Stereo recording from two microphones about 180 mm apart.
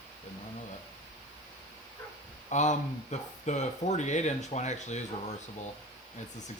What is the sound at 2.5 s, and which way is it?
Speech, 40° left (ahead or behind).